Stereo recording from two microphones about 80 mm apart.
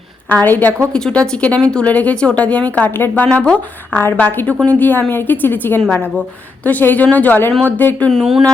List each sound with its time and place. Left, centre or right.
0.3 s a woman's voice: left
0.9 s speech: centre
3.2 s a woman's voice: centre
8.1 s speech: centre